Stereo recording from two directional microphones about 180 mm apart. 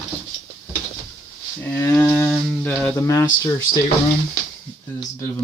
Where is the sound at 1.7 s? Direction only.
15° left (ahead or behind).